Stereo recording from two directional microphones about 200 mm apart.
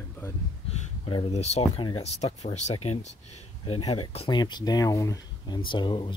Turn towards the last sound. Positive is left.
turn(degrees=25)  # may be behind; listen again after turning